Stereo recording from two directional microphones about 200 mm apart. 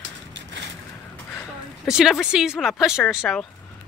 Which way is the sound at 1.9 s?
5° right (ahead or behind).